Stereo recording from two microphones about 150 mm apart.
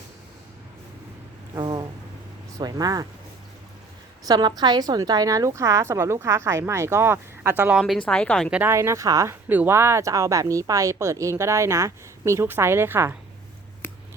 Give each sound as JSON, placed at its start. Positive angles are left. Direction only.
{"t": 1.5, "sound": "a sound", "side_deg": -30}
{"t": 2.6, "sound": "speech", "side_deg": -25}
{"t": 4.3, "sound": "speech", "side_deg": -30}
{"t": 8.4, "sound": "speech", "side_deg": -10}
{"t": 8.7, "sound": "speech", "side_deg": -20}
{"t": 13.8, "sound": "a sound", "side_deg": 15}